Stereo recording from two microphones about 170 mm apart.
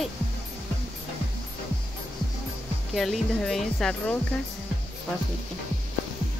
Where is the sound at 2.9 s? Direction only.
Centre (ahead or behind).